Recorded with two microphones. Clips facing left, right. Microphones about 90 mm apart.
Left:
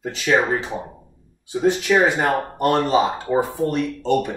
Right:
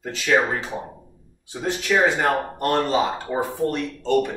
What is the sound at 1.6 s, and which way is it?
A man's voice, 15° left (ahead or behind).